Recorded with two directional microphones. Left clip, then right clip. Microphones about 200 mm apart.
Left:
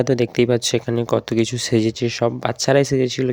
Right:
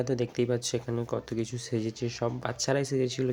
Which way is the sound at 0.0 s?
40° left (ahead or behind).